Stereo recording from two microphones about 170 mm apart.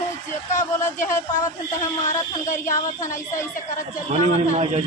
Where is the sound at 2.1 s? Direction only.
50° left (ahead or behind).